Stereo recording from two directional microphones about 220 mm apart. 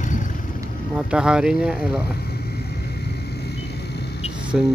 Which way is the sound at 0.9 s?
5° right (ahead or behind).